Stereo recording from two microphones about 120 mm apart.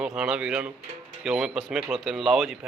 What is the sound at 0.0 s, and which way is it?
Speech, 5° right (ahead or behind).